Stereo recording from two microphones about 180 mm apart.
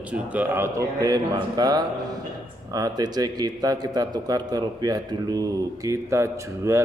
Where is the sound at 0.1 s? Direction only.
10° right (ahead or behind).